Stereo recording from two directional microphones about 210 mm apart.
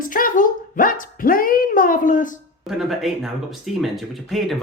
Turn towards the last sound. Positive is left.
turn(degrees=0)  # may be behind; listen again after turning